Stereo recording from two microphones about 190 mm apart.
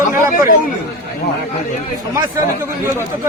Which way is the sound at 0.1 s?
45° left (ahead or behind).